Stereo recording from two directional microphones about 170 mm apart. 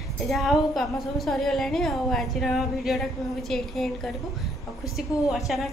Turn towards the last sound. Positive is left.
turn(degrees=0)  # may be behind; listen again after turning